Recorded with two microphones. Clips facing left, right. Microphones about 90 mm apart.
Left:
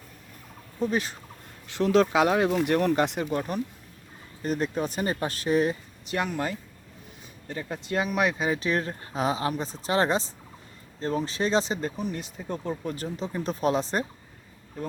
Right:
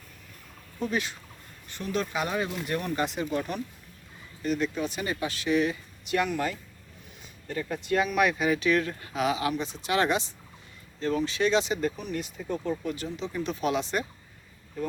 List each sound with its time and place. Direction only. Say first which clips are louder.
0.9 s speech: left 2 dB; 35° left (ahead or behind)
1.6 s speech: left 9 dB; 90° left; by 3.3 s 60° left (ahead or behind)
3.3 s speech: left 2 dB; 40° left (ahead or behind)